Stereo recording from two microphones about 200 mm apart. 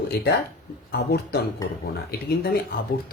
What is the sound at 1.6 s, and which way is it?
Speech, 15° left (ahead or behind).